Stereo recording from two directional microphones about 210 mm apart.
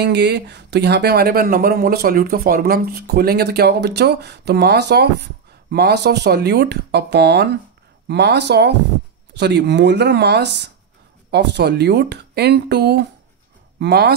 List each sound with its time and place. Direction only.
0.0 s speech: 55° right (ahead or behind)